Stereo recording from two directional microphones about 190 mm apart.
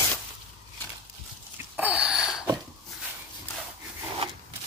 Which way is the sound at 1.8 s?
5° right (ahead or behind).